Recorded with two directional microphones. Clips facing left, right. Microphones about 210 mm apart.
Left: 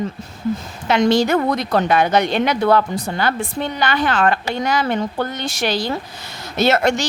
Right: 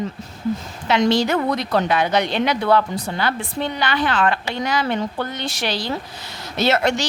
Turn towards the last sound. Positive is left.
turn(degrees=45)  # may be behind; listen again after turning